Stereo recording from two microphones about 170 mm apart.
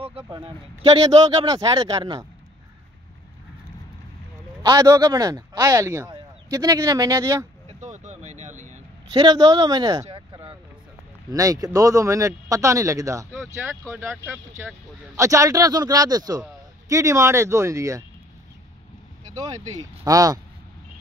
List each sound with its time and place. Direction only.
0.9 s speech: 25° right (ahead or behind)
4.6 s speech: 20° right (ahead or behind)
7.8 s vehicle: 45° right (ahead or behind)
9.1 s speech: 25° right (ahead or behind)
10.0 s a sound: 30° right (ahead or behind)
11.2 s speech: 20° right (ahead or behind)
19.3 s speech: 20° right (ahead or behind)